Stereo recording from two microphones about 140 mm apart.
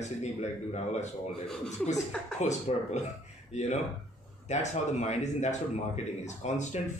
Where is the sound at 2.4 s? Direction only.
55° left (ahead or behind).